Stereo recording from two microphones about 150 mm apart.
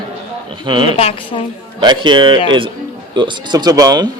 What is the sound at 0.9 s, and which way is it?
Speech, 40° left (ahead or behind).